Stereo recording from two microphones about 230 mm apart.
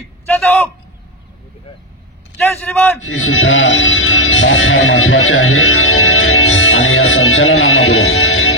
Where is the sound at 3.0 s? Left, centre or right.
Left.